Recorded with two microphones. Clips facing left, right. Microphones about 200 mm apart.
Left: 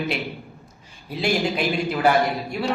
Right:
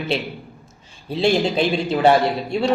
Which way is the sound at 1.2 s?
30° right (ahead or behind).